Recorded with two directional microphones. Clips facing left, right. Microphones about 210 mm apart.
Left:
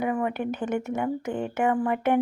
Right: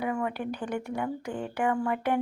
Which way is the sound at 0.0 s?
20° left (ahead or behind).